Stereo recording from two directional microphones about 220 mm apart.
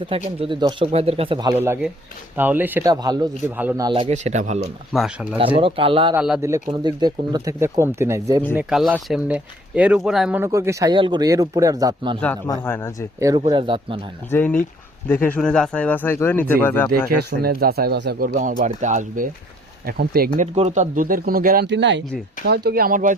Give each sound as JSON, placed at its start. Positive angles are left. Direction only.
{"t": 0.1, "sound": "speech", "side_deg": -25}
{"t": 3.6, "sound": "speech", "side_deg": -5}
{"t": 3.8, "sound": "speech", "side_deg": -25}
{"t": 4.9, "sound": "speech", "side_deg": 0}
{"t": 5.5, "sound": "speech", "side_deg": -25}
{"t": 6.1, "sound": "speech", "side_deg": -5}
{"t": 6.4, "sound": "speech", "side_deg": -15}
{"t": 12.2, "sound": "speech", "side_deg": 10}
{"t": 13.1, "sound": "speech", "side_deg": -15}
{"t": 14.3, "sound": "speech", "side_deg": 10}
{"t": 17.1, "sound": "speech", "side_deg": -45}
{"t": 18.3, "sound": "speech", "side_deg": -35}